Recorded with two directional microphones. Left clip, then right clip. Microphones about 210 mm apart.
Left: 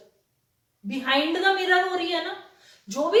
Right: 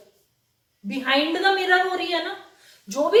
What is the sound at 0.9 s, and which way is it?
Speech, 20° right (ahead or behind).